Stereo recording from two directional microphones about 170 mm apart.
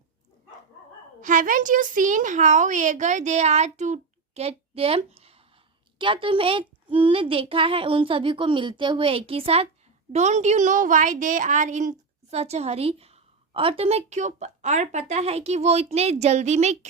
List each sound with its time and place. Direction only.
1.2 s a woman's voice: 50° right (ahead or behind)